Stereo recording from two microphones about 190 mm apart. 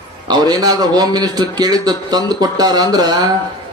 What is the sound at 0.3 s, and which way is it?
A man's voice, 20° right (ahead or behind).